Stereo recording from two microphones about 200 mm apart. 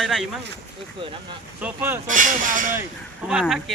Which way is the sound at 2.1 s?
40° right (ahead or behind).